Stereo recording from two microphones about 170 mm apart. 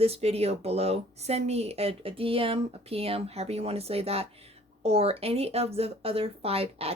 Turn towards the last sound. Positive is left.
turn(degrees=-35)  # may be behind; listen again after turning